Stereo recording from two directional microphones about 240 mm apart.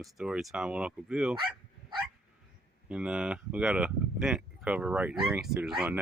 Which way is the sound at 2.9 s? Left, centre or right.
Centre.